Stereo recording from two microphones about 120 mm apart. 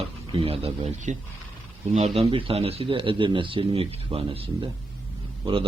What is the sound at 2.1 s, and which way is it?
Speech, 55° right (ahead or behind).